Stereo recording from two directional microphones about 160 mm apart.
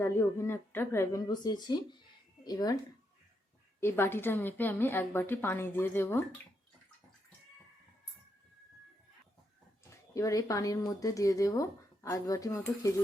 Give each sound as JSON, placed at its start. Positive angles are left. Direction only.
{"t": 0.0, "sound": "a woman's voice", "side_deg": 15}
{"t": 3.8, "sound": "a woman's voice", "side_deg": 15}
{"t": 9.9, "sound": "speech", "side_deg": 20}